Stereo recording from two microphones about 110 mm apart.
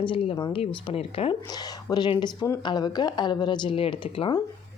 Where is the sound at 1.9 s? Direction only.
45° left (ahead or behind).